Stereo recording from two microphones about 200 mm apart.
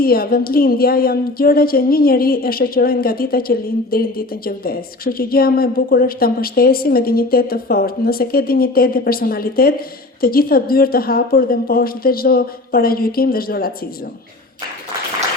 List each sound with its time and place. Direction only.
0.0 s a woman's voice: 50° left (ahead or behind)